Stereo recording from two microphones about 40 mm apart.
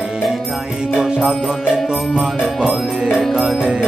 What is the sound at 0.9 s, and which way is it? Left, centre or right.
Music, centre.